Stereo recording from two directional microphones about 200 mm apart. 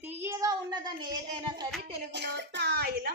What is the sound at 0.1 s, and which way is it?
Child singing, 10° right (ahead or behind).